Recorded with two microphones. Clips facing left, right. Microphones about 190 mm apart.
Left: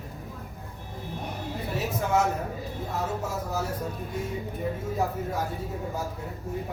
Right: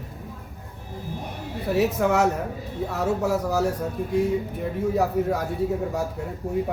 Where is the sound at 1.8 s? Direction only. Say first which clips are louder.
Right 5 dB; 70° right (ahead or behind).